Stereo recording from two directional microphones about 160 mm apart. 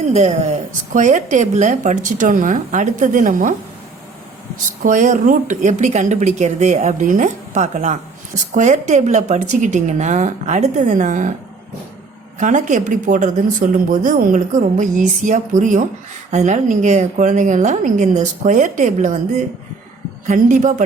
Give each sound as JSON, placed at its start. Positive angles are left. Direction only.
{"t": 0.0, "sound": "a woman's voice", "side_deg": -40}
{"t": 0.9, "sound": "a woman's voice", "side_deg": -50}
{"t": 4.5, "sound": "a woman's voice", "side_deg": -55}
{"t": 12.4, "sound": "a woman's voice", "side_deg": -50}
{"t": 20.2, "sound": "a woman's voice", "side_deg": -50}